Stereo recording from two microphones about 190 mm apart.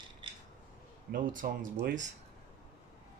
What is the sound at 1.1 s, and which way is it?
Speech, 45° right (ahead or behind).